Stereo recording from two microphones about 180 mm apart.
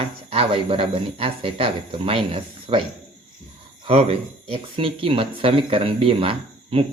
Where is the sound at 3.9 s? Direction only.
35° right (ahead or behind).